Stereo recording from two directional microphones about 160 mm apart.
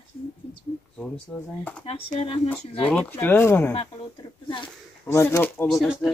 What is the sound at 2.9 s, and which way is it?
Speech, 10° left (ahead or behind).